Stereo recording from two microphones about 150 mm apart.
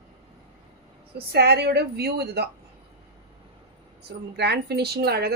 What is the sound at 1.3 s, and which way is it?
A woman's voice, 90° right.